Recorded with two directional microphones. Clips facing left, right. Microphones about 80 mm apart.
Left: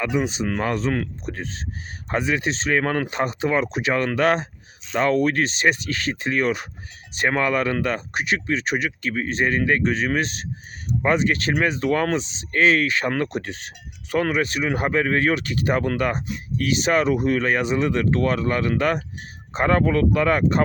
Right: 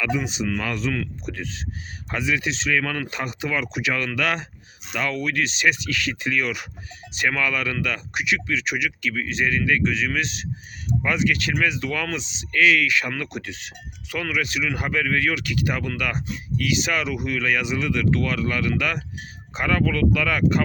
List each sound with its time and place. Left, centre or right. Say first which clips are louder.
0.0 s speech: left 2 dB; left